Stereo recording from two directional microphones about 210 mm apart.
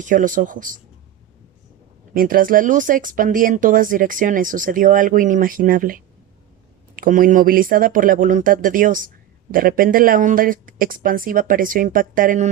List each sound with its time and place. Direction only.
0.0 s speech: 40° right (ahead or behind)
2.1 s speech: 40° right (ahead or behind)